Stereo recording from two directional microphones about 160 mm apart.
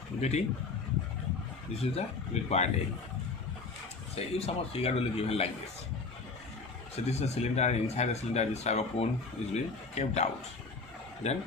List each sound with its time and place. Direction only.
0.2 s speech: 45° left (ahead or behind)
1.8 s a man's voice: 40° left (ahead or behind)
4.1 s a man's voice: 40° left (ahead or behind)
6.9 s speech: 40° left (ahead or behind)
11.2 s speech: 45° left (ahead or behind)